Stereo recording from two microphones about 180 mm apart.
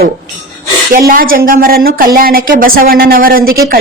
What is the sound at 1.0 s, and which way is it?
A woman's voice, 50° right (ahead or behind).